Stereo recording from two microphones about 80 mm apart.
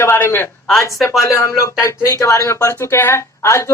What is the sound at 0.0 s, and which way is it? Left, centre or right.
Speech, left.